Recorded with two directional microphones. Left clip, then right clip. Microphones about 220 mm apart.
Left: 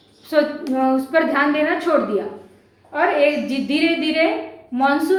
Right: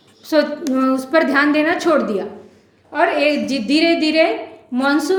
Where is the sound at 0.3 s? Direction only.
50° right (ahead or behind).